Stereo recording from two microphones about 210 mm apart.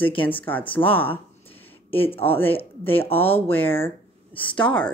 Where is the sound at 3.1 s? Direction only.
10° left (ahead or behind).